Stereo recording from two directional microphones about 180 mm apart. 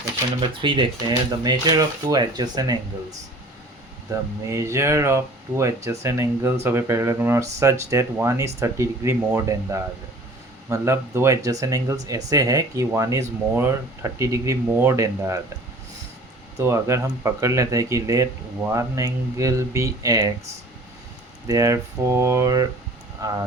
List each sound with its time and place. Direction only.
0.4 s speech: 25° right (ahead or behind)
4.1 s speech: 15° right (ahead or behind)
16.6 s speech: 15° right (ahead or behind)
21.4 s speech: 20° right (ahead or behind)